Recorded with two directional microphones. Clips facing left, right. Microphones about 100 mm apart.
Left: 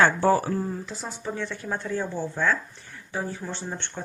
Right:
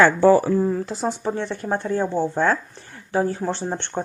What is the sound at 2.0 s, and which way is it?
Speech, 25° right (ahead or behind).